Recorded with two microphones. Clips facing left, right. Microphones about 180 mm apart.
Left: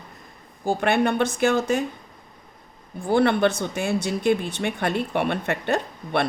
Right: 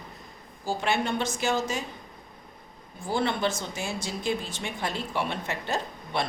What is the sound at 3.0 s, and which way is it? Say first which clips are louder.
Speech: left 8 dB; 60° left (ahead or behind).